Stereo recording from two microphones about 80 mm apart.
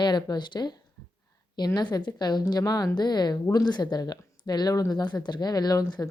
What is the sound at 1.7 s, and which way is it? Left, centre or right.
A woman's voice, left.